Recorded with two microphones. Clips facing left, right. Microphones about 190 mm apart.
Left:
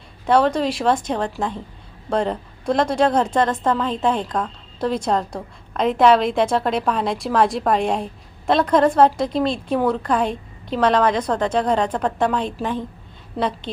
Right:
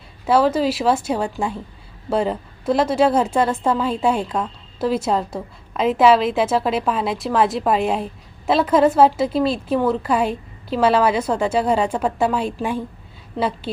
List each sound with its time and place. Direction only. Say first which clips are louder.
0.3 s a woman's voice: right 1 dB; 5° right (ahead or behind)